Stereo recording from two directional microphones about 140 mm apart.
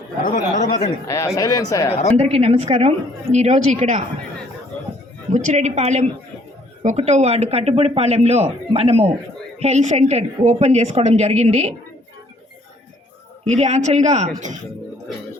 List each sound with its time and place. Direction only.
0.2 s a sound: 90° left
1.0 s speech: 20° left (ahead or behind)
2.1 s speech: 45° right (ahead or behind)
5.3 s speech: 55° right (ahead or behind)
13.4 s speech: 55° right (ahead or behind)